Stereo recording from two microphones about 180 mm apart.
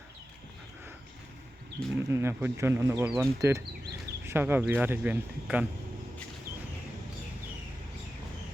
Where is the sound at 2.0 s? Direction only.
15° right (ahead or behind).